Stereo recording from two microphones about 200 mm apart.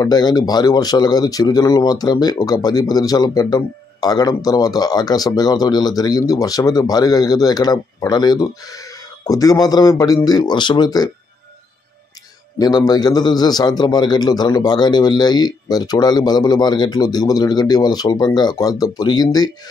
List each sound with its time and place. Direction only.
0.0 s speech: 20° left (ahead or behind)
12.5 s speech: 20° left (ahead or behind)